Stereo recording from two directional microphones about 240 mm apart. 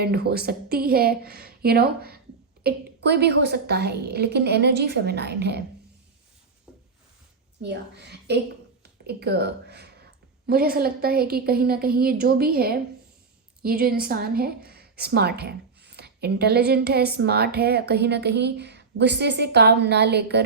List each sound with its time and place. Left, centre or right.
0.0 s a woman's voice: right
7.6 s a woman's voice: right